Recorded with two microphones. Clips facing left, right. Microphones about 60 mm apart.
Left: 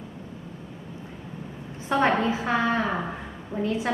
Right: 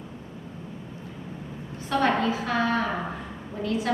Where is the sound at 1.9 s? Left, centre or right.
Left.